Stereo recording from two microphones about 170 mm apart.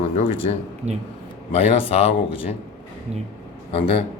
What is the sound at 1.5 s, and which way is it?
Speech, 35° left (ahead or behind).